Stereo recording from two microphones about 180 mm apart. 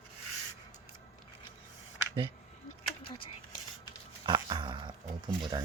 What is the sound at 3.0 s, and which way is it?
Speech, 30° left (ahead or behind).